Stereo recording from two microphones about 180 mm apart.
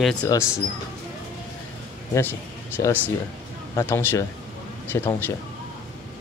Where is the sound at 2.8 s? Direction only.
15° left (ahead or behind).